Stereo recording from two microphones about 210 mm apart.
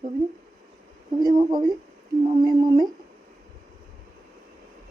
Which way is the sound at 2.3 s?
20° right (ahead or behind).